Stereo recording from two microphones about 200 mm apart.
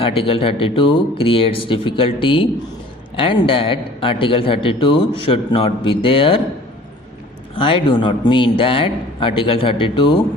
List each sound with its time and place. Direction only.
0.0 s a man's voice: 25° left (ahead or behind)
7.5 s a man's voice: 25° left (ahead or behind)